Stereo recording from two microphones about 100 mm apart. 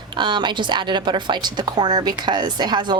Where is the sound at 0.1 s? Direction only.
50° right (ahead or behind).